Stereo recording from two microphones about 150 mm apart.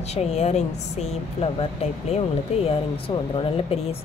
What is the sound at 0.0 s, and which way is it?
A woman's voice, 45° left (ahead or behind).